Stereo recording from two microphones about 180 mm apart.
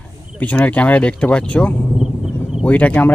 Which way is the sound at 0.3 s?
10° left (ahead or behind).